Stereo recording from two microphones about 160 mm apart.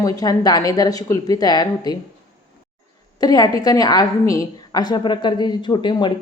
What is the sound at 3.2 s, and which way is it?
A woman's voice, 25° left (ahead or behind).